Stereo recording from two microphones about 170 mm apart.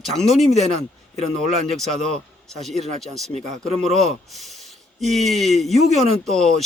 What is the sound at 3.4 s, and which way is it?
Speech, 45° right (ahead or behind).